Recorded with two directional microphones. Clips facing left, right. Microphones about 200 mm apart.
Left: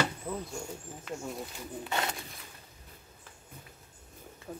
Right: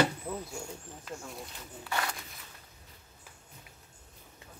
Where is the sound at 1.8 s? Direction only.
25° left (ahead or behind).